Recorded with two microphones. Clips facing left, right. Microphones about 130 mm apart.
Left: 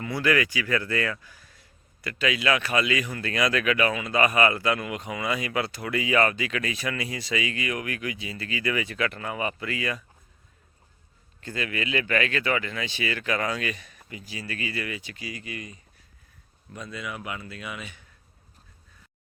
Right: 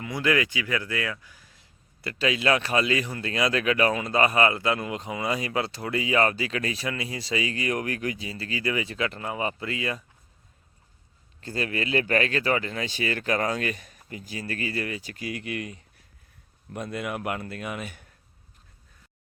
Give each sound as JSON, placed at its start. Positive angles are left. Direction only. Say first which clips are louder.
{"t": 0.0, "sound": "speech", "louder": "left 1 dB", "side_deg": -20}
{"t": 2.0, "sound": "speech", "louder": "right 1 dB", "side_deg": -30}
{"t": 11.3, "sound": "speech", "louder": "right 2 dB", "side_deg": -35}
{"t": 15.3, "sound": "speech", "louder": "right 6 dB", "side_deg": -65}
{"t": 16.7, "sound": "speech", "louder": "right 5 dB", "side_deg": -55}